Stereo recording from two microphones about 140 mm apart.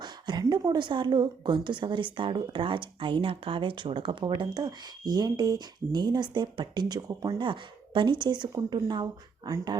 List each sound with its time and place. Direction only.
0.0 s a woman's voice: 30° right (ahead or behind)